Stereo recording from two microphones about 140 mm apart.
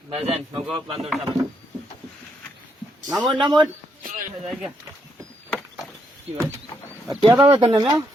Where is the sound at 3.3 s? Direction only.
35° right (ahead or behind).